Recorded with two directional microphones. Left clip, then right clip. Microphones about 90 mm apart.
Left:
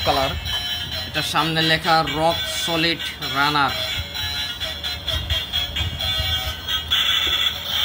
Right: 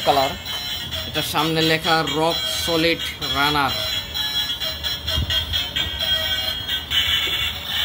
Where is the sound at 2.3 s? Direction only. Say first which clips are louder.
Even; 35° left (ahead or behind).